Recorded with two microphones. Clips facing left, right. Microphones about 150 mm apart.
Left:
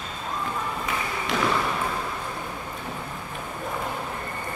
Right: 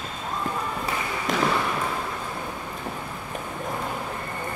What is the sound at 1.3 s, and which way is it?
Basketball bounce, 45° right (ahead or behind).